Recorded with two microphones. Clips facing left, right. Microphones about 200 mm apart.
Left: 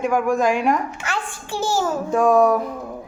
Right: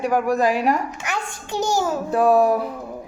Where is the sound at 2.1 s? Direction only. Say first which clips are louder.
Even; 35° right (ahead or behind).